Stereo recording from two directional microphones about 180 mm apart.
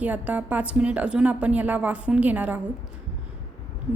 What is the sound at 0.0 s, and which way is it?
A woman's voice, 10° right (ahead or behind).